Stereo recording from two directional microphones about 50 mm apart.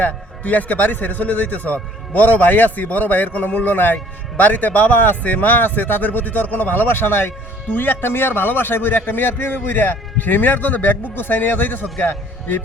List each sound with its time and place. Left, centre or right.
0.0 s speech: left